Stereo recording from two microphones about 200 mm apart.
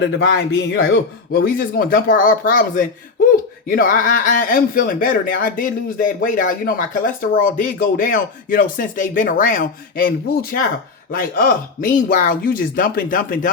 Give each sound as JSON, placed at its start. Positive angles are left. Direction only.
{"t": 0.0, "sound": "a man's voice", "side_deg": 60}
{"t": 11.1, "sound": "a man's voice", "side_deg": 45}